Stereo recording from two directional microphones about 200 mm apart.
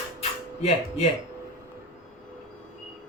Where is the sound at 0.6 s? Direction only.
30° left (ahead or behind).